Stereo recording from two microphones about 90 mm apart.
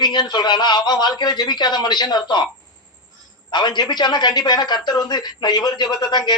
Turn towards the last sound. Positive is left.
turn(degrees=50)  # may be behind; listen again after turning